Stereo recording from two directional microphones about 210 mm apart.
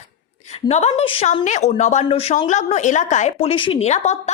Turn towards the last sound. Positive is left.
turn(degrees=30)  # may be behind; listen again after turning